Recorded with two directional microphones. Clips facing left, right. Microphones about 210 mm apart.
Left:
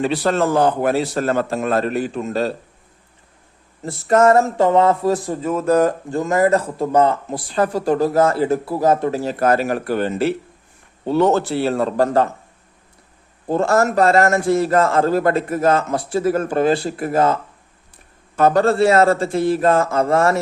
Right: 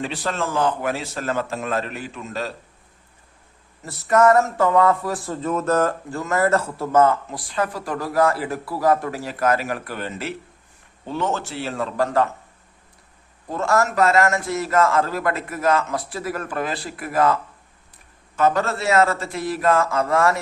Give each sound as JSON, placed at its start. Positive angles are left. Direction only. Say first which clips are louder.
{"t": 0.0, "sound": "speech", "louder": "left 8 dB", "side_deg": 40}
{"t": 3.8, "sound": "a man's voice", "louder": "left 3 dB", "side_deg": 30}
{"t": 7.3, "sound": "a man's voice", "louder": "left 6 dB", "side_deg": 30}
{"t": 13.5, "sound": "a man's voice", "louder": "left 5 dB", "side_deg": 30}